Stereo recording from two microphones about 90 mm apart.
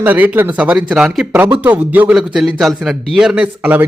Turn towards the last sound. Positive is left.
turn(degrees=-15)  # may be behind; listen again after turning